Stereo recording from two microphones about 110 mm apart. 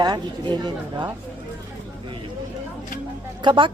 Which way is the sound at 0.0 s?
40° right (ahead or behind).